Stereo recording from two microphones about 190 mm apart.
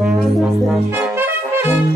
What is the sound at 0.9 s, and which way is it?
Brass instrument, 10° right (ahead or behind).